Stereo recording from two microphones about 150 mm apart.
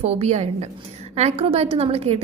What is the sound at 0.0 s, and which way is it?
A woman's voice, 45° right (ahead or behind).